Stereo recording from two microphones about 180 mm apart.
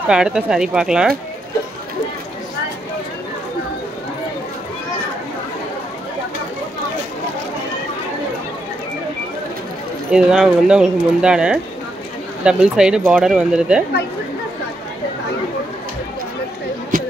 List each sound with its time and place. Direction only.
0.1 s speech: 5° right (ahead or behind)
10.1 s speech: 5° right (ahead or behind)